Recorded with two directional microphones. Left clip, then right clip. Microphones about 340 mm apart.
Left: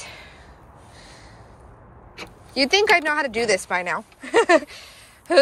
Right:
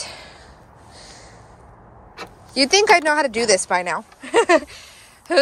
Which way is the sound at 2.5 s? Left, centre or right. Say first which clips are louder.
Right 3 dB; centre.